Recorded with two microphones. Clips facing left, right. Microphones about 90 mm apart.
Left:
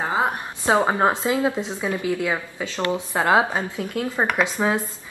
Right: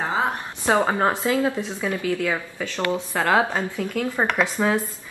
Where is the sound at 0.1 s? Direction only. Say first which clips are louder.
Left 1 dB; 20° left (ahead or behind).